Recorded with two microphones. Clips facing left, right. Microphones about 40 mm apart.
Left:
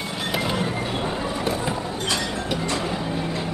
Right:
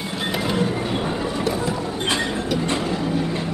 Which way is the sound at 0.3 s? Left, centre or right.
Centre.